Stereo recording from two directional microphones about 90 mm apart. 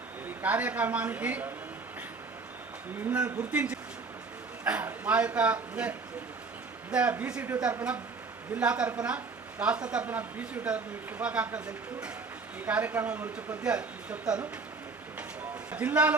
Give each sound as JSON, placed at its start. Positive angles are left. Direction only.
{"t": 0.4, "sound": "speech", "side_deg": -15}
{"t": 3.1, "sound": "a man's voice", "side_deg": -15}
{"t": 15.7, "sound": "speech", "side_deg": -15}